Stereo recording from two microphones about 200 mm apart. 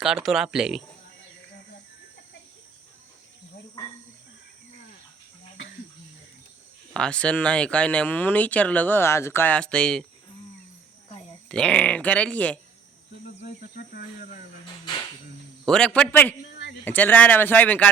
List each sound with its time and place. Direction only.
0.0 s speech: centre (ahead or behind)
6.9 s speech: 5° left (ahead or behind)
11.4 s speech: 5° left (ahead or behind)
13.4 s a sound: 45° left (ahead or behind)
15.6 s speech: 5° left (ahead or behind)